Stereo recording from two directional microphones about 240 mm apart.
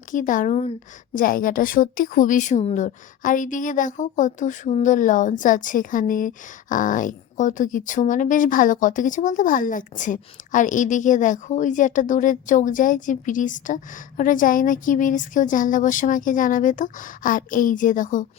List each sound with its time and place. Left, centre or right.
0.1 s a woman's voice: left